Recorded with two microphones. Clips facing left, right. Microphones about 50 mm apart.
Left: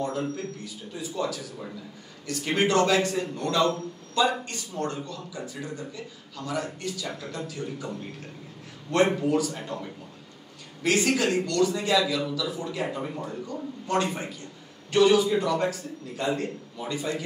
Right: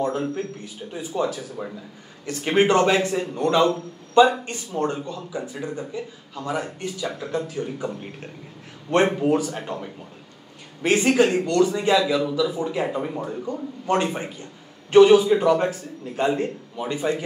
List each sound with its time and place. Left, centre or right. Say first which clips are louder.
0.9 s a man's voice: right 5 dB; right